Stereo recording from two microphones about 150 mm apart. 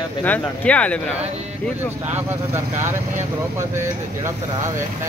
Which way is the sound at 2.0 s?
15° right (ahead or behind).